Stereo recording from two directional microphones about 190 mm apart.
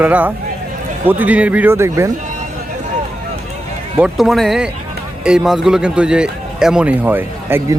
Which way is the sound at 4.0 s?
Centre (ahead or behind).